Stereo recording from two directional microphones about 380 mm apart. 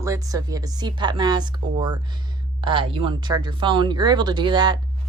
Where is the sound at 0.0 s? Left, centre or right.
Centre.